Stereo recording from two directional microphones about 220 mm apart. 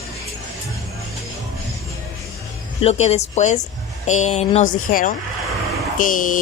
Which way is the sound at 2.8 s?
30° left (ahead or behind).